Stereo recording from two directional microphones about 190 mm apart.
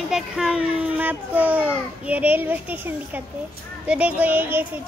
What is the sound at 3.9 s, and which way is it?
Speech, 5° right (ahead or behind).